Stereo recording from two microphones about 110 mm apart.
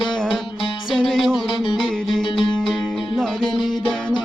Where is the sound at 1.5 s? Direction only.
50° left (ahead or behind).